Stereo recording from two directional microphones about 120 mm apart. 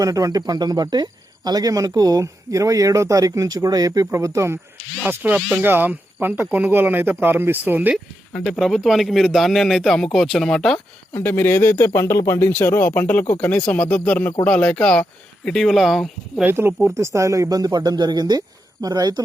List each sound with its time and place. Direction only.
0.0 s speech: 30° right (ahead or behind)
5.0 s speech: 10° right (ahead or behind)
8.4 s speech: centre (ahead or behind)
11.1 s speech: 20° left (ahead or behind); by 16.4 s centre (ahead or behind)
16.4 s speech: 20° right (ahead or behind)